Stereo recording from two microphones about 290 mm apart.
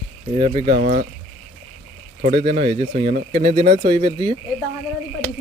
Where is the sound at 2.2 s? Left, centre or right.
Right.